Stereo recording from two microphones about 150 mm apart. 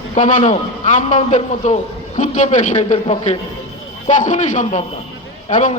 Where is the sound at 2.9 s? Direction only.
40° left (ahead or behind).